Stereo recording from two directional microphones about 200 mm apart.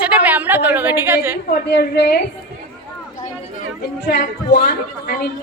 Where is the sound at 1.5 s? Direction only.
55° left (ahead or behind).